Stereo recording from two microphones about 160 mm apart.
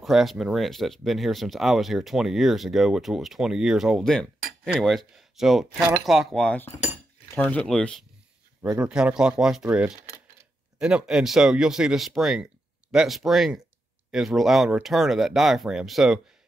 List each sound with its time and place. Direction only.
0.0 s speech: centre (ahead or behind)
8.6 s speech: 5° right (ahead or behind)
9.9 s a sound: 20° right (ahead or behind)
10.8 s speech: 5° right (ahead or behind)